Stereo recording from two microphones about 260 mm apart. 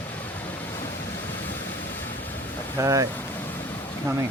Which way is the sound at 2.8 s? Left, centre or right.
Centre.